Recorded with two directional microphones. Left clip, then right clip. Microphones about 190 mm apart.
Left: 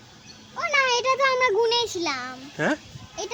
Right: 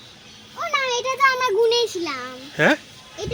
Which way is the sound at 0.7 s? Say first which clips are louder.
Left 2 dB; 40° right (ahead or behind).